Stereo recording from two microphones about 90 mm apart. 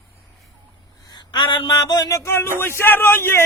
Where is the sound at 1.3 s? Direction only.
60° left (ahead or behind).